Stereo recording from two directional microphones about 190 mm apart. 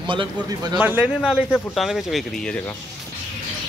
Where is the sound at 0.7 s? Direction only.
10° right (ahead or behind).